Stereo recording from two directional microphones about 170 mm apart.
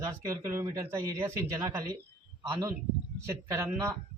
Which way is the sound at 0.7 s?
15° right (ahead or behind).